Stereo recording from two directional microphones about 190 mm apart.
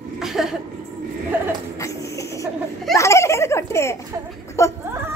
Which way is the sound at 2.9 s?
15° left (ahead or behind).